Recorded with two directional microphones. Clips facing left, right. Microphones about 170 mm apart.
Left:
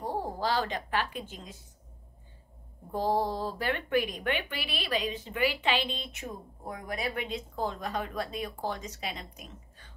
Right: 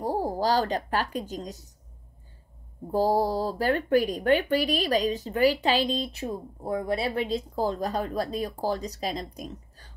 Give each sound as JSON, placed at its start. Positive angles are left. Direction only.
{"t": 0.0, "sound": "a woman's voice", "side_deg": -40}
{"t": 2.9, "sound": "speech", "side_deg": -35}